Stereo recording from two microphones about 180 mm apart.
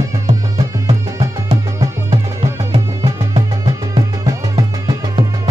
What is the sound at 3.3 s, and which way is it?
Music, 25° right (ahead or behind).